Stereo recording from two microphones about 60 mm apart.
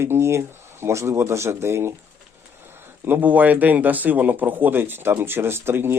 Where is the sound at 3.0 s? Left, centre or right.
Right.